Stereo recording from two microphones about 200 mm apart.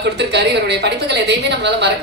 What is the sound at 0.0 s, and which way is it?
A woman's voice, 55° right (ahead or behind).